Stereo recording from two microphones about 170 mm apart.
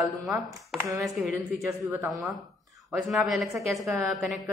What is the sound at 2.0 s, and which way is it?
A man's voice, centre (ahead or behind).